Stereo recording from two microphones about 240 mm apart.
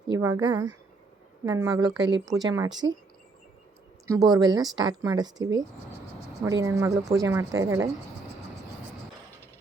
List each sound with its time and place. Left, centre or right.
0.1 s speech: centre
4.0 s speech: centre